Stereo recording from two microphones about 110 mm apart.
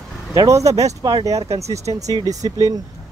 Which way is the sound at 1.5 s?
80° right.